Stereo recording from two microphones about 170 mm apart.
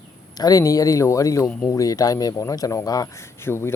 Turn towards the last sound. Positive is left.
turn(degrees=15)  # may be behind; listen again after turning